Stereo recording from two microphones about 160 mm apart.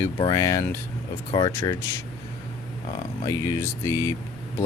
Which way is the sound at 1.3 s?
30° left (ahead or behind).